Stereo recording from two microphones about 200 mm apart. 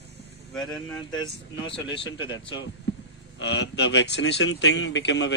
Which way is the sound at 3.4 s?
60° left (ahead or behind).